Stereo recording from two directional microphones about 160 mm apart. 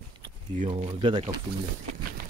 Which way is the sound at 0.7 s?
35° right (ahead or behind).